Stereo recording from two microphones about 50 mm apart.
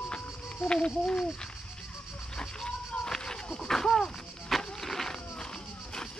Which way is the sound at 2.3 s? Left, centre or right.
Centre.